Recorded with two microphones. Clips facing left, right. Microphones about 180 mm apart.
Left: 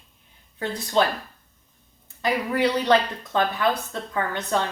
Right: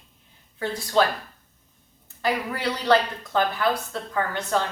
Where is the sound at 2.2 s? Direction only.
20° left (ahead or behind).